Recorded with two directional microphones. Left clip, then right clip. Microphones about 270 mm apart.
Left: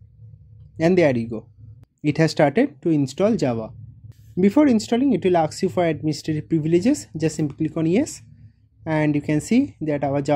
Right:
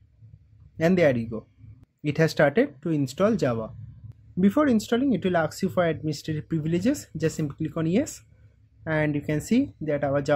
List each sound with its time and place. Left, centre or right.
0.7 s speech: centre